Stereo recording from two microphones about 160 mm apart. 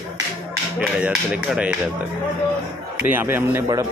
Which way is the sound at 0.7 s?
10° right (ahead or behind).